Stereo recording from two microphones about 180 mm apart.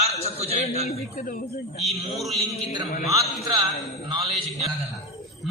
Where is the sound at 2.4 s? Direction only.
35° left (ahead or behind).